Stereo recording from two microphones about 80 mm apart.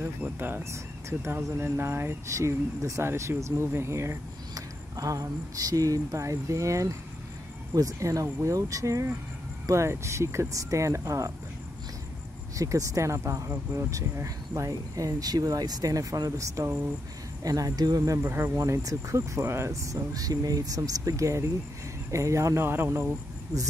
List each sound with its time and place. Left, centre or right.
0.0 s speech: right
12.5 s speech: right
18.3 s speech: right
18.6 s speech: right